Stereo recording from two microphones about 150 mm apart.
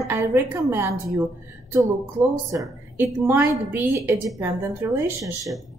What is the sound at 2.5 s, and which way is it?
A woman's voice, 15° right (ahead or behind).